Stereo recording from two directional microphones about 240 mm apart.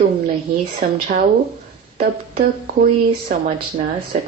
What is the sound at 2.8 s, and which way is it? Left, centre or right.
Speech, right.